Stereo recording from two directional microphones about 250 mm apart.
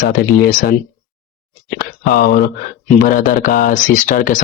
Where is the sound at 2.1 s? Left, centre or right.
Left.